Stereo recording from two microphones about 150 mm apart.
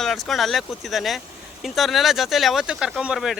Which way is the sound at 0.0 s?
Centre (ahead or behind).